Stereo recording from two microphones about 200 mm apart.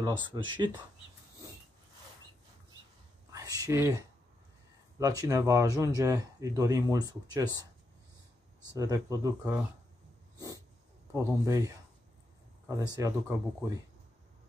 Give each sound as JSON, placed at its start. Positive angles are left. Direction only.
{"t": 0.0, "sound": "speech", "side_deg": -20}
{"t": 3.3, "sound": "whispering", "side_deg": -15}
{"t": 4.9, "sound": "speech", "side_deg": -15}
{"t": 8.7, "sound": "speech", "side_deg": -15}
{"t": 10.3, "sound": "dog", "side_deg": -15}
{"t": 11.1, "sound": "speech", "side_deg": -15}